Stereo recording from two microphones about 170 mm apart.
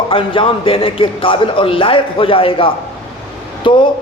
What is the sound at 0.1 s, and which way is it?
A man's voice, 30° left (ahead or behind).